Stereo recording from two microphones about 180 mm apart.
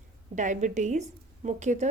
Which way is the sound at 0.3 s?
45° right (ahead or behind).